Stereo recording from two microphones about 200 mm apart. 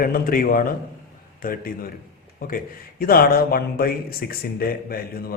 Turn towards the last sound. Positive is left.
turn(degrees=50)  # may be behind; listen again after turning